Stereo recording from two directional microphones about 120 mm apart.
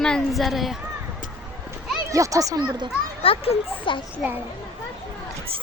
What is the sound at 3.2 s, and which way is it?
Speech, 50° left (ahead or behind).